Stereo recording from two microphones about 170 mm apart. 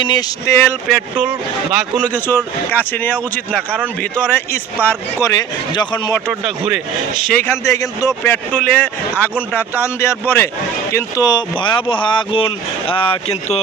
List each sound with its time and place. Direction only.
0.0 s speech: 25° left (ahead or behind)
0.9 s speech: centre (ahead or behind)
2.1 s a man's voice: 10° left (ahead or behind)
6.2 s speech: 5° right (ahead or behind)
7.3 s a man's voice: 15° left (ahead or behind); by 13.6 s 35° left (ahead or behind)